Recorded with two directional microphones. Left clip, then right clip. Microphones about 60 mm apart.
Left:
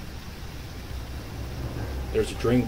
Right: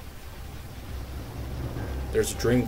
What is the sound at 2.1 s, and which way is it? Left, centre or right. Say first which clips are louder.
Speech: even; right.